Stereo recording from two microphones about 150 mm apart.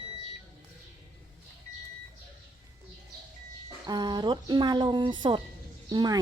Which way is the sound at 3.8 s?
30° right (ahead or behind).